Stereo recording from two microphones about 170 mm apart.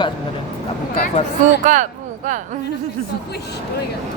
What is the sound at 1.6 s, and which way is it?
Speech, 45° right (ahead or behind).